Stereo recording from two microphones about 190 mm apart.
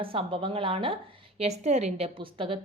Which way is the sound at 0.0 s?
30° right (ahead or behind).